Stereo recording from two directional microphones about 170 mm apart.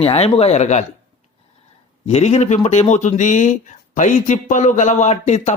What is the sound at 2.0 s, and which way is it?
Speech, 40° left (ahead or behind).